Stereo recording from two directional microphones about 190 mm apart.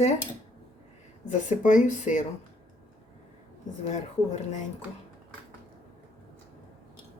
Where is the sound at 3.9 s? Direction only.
40° left (ahead or behind).